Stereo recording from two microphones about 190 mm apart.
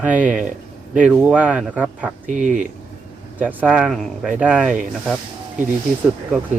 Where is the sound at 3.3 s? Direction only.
10° right (ahead or behind).